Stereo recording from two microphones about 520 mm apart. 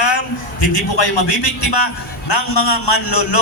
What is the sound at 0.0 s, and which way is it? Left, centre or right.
A man's voice, left.